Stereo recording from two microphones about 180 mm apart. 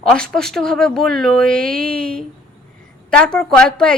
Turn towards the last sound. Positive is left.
turn(degrees=5)  # may be behind; listen again after turning